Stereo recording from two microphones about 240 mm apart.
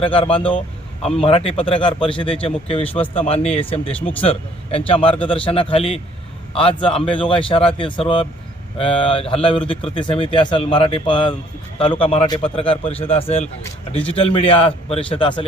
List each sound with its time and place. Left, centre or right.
0.0 s a man's voice: left